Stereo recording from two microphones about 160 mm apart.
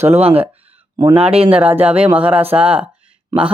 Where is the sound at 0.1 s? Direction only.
40° right (ahead or behind).